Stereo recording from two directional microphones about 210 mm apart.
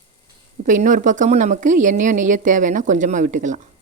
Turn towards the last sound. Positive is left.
turn(degrees=-35)  # may be behind; listen again after turning